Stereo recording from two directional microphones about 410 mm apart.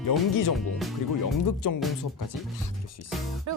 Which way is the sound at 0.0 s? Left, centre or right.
Left.